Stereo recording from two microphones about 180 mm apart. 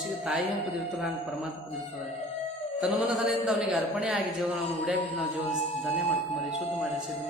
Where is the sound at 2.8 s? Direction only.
Centre (ahead or behind).